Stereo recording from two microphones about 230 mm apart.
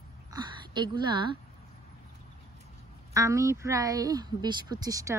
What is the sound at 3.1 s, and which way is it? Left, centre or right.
Speech, centre.